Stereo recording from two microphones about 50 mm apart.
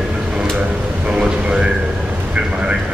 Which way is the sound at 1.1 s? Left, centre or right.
Right.